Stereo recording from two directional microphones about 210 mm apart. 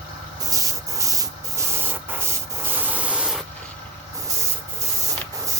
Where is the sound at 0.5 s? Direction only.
15° right (ahead or behind).